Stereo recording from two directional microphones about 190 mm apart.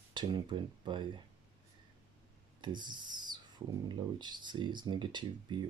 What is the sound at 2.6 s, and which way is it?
Speech, 25° right (ahead or behind).